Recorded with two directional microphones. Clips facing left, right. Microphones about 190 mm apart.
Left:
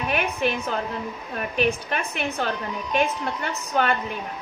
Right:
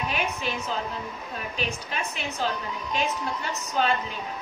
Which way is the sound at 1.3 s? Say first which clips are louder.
Left 9 dB; 60° left (ahead or behind).